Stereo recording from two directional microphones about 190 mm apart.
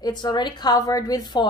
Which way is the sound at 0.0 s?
20° left (ahead or behind).